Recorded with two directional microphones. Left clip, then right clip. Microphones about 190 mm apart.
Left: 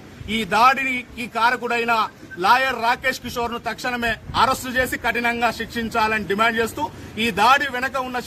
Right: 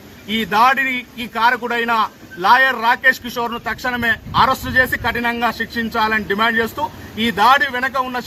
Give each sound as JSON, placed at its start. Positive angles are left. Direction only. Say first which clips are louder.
{"t": 0.3, "sound": "a man's voice", "louder": "right 2 dB", "side_deg": 15}